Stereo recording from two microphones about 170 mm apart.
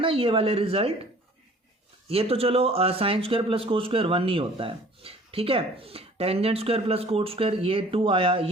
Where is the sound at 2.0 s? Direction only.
35° right (ahead or behind).